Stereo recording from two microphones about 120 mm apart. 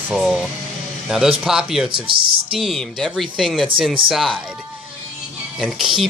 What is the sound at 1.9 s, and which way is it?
Speech, 45° right (ahead or behind).